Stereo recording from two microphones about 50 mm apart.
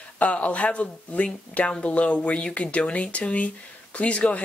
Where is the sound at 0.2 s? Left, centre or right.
Left.